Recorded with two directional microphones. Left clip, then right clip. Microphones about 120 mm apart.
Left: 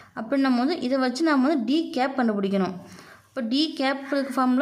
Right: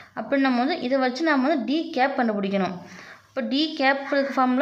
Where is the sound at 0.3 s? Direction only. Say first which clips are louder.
Right 1 dB; 35° left (ahead or behind).